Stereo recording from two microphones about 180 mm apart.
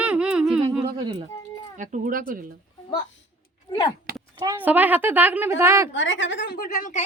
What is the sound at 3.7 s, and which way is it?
Speech, 25° left (ahead or behind).